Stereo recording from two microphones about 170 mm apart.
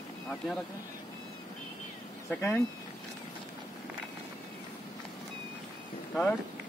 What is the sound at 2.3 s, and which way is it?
Speech, 15° left (ahead or behind).